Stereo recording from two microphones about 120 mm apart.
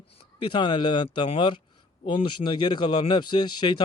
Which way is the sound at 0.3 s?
40° left (ahead or behind).